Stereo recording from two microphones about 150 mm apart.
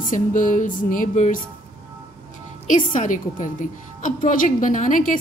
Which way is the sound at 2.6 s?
60° left (ahead or behind).